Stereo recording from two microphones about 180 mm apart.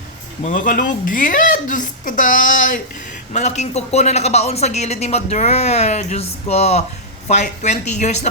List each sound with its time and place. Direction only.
0.4 s speech: 45° left (ahead or behind)